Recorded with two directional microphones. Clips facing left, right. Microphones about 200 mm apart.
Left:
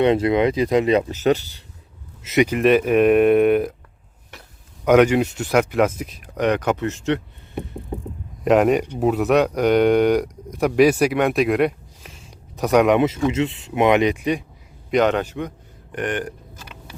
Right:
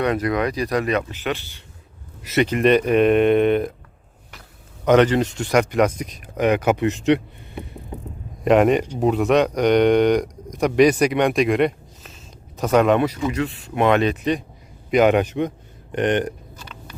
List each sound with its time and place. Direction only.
0.0 s speech: 25° left (ahead or behind)
2.2 s speech: 15° left (ahead or behind)
4.9 s speech: 10° left (ahead or behind); by 7.2 s 15° right (ahead or behind)
8.4 s speech: centre (ahead or behind)
14.8 s speech: 5° right (ahead or behind); by 16.3 s 20° right (ahead or behind)